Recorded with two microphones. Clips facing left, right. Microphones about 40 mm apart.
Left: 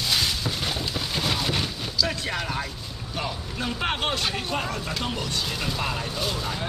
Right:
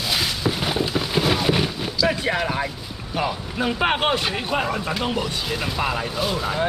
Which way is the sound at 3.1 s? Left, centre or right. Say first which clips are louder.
Right 7 dB; centre.